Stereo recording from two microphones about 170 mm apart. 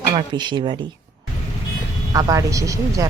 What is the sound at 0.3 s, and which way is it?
Speech, 30° right (ahead or behind).